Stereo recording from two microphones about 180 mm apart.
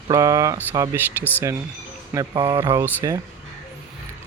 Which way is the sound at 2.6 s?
15° right (ahead or behind).